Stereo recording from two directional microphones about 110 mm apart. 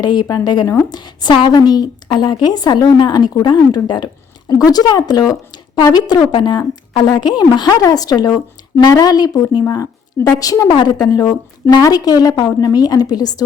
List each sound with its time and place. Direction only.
0.0 s speech: 40° left (ahead or behind)